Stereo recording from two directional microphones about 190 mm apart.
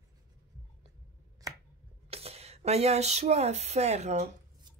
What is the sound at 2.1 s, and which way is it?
Speech, 35° right (ahead or behind).